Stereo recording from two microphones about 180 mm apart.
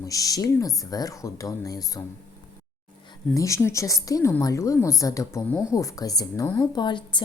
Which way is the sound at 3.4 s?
15° left (ahead or behind).